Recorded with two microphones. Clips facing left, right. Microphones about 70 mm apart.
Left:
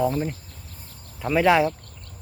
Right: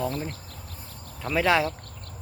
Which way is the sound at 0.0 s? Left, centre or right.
Centre.